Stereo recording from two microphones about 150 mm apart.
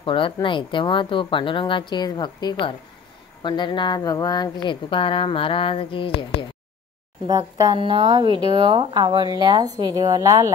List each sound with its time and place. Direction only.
0.0 s speech: 35° left (ahead or behind)
7.2 s speech: 25° right (ahead or behind)